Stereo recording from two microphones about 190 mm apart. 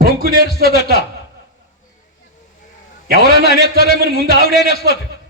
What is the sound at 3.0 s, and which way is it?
A man's voice, 55° right (ahead or behind).